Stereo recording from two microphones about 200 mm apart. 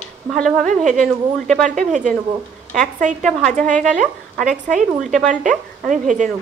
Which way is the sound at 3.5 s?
35° right (ahead or behind).